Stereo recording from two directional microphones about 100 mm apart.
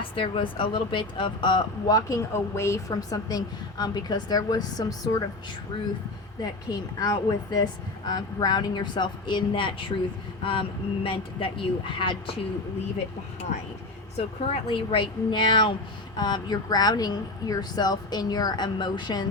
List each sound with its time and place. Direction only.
0.2 s speech: 60° left (ahead or behind)
1.9 s a woman's voice: 35° left (ahead or behind)
5.7 s speech: 55° left (ahead or behind)
6.4 s speech: 40° left (ahead or behind)
14.2 s speech: 85° left; by 19.2 s 45° left (ahead or behind)